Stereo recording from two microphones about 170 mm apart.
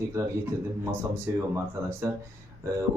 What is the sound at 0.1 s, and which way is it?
Speech, 15° right (ahead or behind).